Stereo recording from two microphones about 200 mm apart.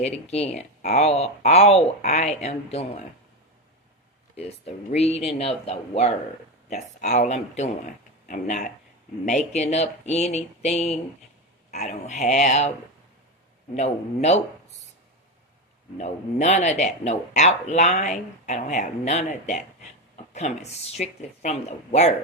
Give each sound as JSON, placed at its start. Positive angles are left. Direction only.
{"t": 0.0, "sound": "speech", "side_deg": 35}
{"t": 4.4, "sound": "a man's voice", "side_deg": 30}
{"t": 13.7, "sound": "speech", "side_deg": 35}
{"t": 16.0, "sound": "speech", "side_deg": 35}